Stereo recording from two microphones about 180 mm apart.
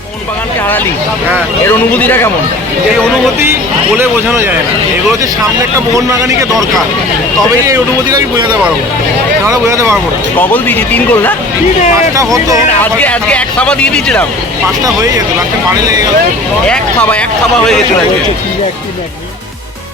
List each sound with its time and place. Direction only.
1.9 s speech: 10° left (ahead or behind)
3.9 s speech: 10° right (ahead or behind)
6.1 s speech: 15° right (ahead or behind)
9.5 s speech: 15° right (ahead or behind)
10.5 s speech: 10° left (ahead or behind)
12.1 s speech: 20° right (ahead or behind)
12.8 s speech: 10° left (ahead or behind)
16.6 s speech: 5° left (ahead or behind)